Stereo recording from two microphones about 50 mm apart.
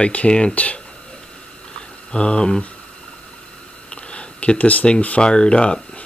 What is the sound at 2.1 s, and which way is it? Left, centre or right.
Speech, centre.